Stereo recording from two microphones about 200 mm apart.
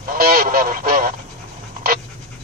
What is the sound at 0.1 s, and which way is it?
Honk, 45° right (ahead or behind).